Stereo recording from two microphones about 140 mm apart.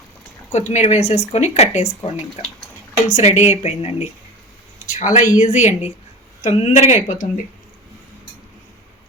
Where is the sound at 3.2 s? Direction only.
55° left (ahead or behind).